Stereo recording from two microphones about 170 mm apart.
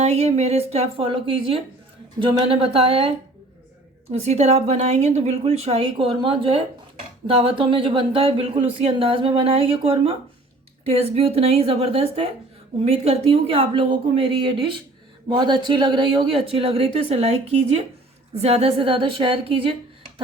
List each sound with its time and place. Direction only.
0.0 s speech: 40° right (ahead or behind)
4.1 s speech: 40° right (ahead or behind)